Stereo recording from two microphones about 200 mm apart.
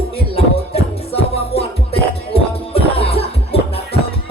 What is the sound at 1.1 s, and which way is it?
Music, 30° left (ahead or behind).